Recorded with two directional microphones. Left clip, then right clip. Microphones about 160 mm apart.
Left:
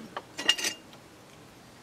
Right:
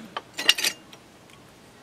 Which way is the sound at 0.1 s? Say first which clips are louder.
Right 5 dB; 20° right (ahead or behind).